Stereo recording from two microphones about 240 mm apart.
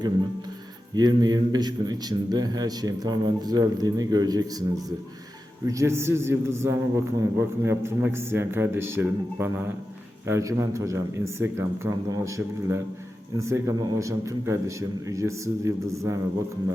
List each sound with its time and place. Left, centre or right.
0.9 s a man's voice: centre